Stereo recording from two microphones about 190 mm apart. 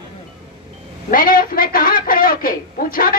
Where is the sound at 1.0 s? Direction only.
50° left (ahead or behind).